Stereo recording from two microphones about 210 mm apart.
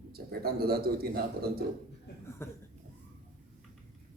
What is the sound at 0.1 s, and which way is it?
A man's voice, 50° right (ahead or behind).